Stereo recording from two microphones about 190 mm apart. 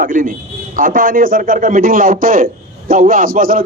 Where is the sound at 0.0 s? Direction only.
45° right (ahead or behind).